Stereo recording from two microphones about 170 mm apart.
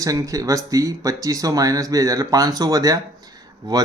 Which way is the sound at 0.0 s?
20° right (ahead or behind).